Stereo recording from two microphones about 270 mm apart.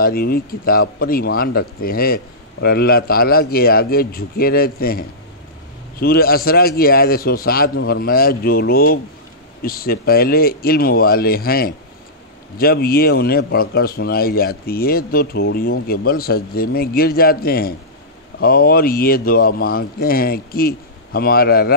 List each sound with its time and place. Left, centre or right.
0.0 s a man's voice: left